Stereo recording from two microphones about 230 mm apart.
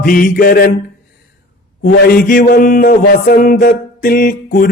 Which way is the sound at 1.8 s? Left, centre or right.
Left.